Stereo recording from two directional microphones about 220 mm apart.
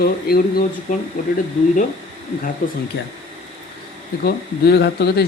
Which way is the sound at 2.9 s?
50° left (ahead or behind).